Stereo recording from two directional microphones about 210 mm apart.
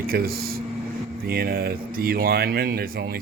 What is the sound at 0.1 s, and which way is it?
Speech, 45° right (ahead or behind).